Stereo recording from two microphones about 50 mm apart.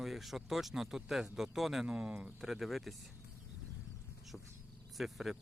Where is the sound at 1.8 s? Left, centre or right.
Right; by 2.9 s centre.